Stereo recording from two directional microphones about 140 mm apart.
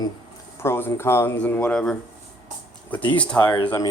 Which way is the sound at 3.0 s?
35° left (ahead or behind).